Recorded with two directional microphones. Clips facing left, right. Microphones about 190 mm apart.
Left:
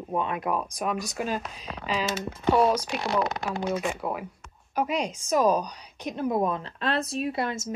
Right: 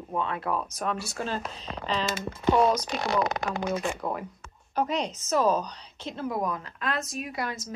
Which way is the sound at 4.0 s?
10° left (ahead or behind).